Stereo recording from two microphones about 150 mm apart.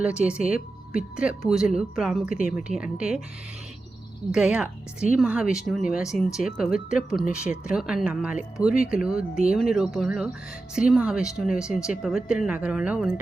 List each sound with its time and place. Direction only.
0.2 s speech: 5° right (ahead or behind)
0.4 s speech: 65° left (ahead or behind)
1.1 s speech: 5° right (ahead or behind)
4.3 s speech: 5° right (ahead or behind)